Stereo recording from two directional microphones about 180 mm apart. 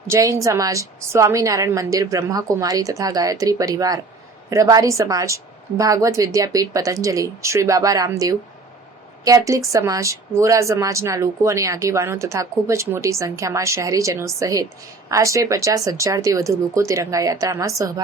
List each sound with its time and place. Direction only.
0.1 s a woman's voice: 15° right (ahead or behind)